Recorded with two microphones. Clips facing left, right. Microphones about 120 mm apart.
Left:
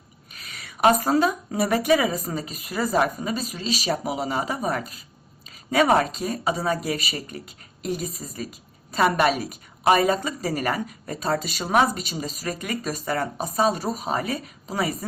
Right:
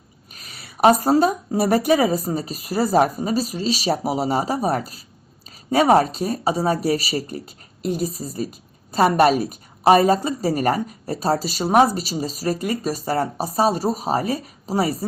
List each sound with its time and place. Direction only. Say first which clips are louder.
0.5 s speech: right 4 dB; 35° right (ahead or behind)